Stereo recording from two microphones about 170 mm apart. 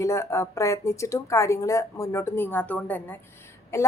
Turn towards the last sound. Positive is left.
turn(degrees=15)  # may be behind; listen again after turning